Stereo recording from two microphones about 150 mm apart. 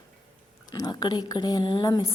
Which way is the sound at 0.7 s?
30° left (ahead or behind).